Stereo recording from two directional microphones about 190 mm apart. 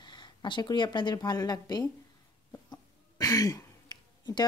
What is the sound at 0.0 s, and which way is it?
Speech, 25° left (ahead or behind).